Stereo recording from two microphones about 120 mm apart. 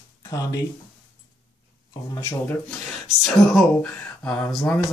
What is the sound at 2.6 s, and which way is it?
Speech, centre (ahead or behind).